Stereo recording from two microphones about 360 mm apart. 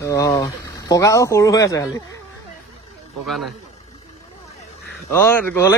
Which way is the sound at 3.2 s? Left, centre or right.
Centre.